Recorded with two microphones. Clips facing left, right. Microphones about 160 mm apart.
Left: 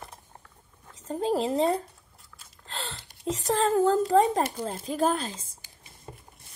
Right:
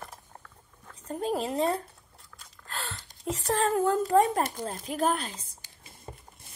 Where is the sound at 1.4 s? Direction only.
25° left (ahead or behind).